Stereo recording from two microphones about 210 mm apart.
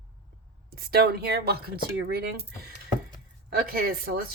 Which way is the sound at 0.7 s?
50° right (ahead or behind).